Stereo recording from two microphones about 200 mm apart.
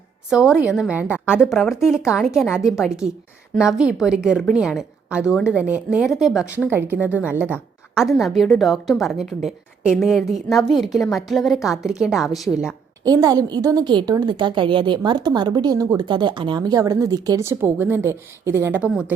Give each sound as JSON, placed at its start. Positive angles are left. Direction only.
{"t": 0.3, "sound": "a woman's voice", "side_deg": -5}
{"t": 13.1, "sound": "a woman's voice", "side_deg": -20}